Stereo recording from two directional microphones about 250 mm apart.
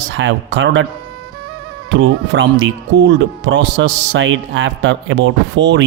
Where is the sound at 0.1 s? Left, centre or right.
Right.